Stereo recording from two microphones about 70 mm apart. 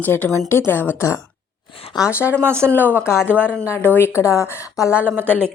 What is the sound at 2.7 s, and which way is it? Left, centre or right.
Speech, left.